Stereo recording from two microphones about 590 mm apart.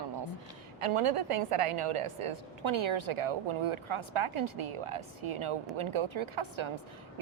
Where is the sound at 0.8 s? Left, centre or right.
Right.